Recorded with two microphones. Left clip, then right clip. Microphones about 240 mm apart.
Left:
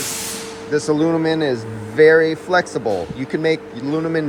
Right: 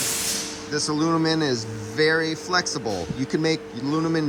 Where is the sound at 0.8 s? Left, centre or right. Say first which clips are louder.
Left 4 dB; centre.